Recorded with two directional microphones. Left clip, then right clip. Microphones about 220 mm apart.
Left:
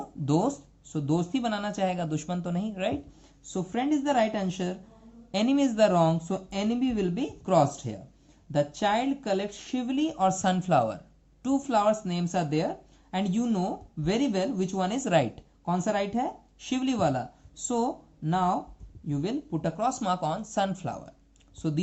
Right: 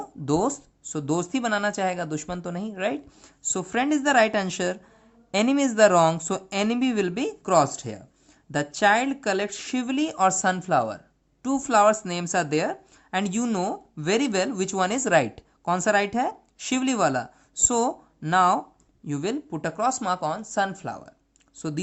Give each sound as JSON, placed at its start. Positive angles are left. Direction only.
{"t": 0.0, "sound": "speech", "side_deg": -55}
{"t": 3.5, "sound": "speech", "side_deg": -60}